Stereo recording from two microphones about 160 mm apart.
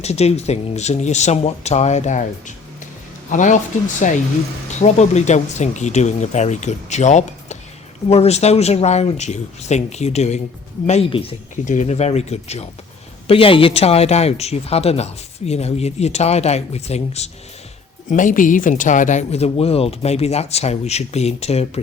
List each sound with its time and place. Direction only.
0.0 s speech: 40° left (ahead or behind)
3.2 s speech: 50° left (ahead or behind); by 11.3 s 35° left (ahead or behind)
11.6 s speech: 50° left (ahead or behind)
18.1 s speech: 55° left (ahead or behind)